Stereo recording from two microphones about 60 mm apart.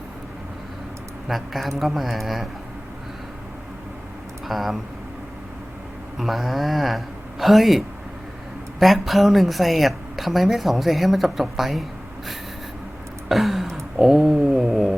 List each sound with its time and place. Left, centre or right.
1.3 s a woman's voice: centre
4.4 s a woman's voice: centre
6.1 s a woman's voice: centre
13.2 s a sound: centre